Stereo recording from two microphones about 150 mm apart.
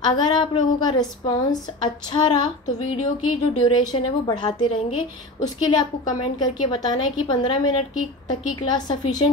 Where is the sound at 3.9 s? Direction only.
30° left (ahead or behind).